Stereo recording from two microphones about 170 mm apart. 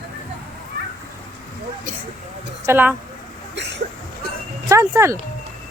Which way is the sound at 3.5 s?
90° right.